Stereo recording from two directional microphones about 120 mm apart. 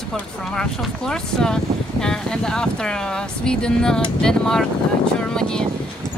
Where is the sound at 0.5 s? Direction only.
5° left (ahead or behind).